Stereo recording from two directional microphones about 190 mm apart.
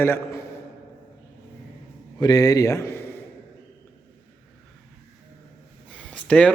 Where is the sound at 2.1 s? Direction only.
20° left (ahead or behind).